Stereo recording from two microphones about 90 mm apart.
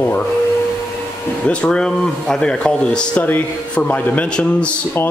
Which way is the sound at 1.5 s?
10° left (ahead or behind).